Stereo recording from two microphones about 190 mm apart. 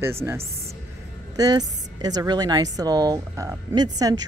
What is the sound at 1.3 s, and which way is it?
A woman's voice, 20° right (ahead or behind).